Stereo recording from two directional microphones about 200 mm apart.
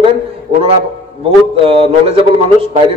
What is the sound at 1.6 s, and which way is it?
A man's voice, 30° right (ahead or behind).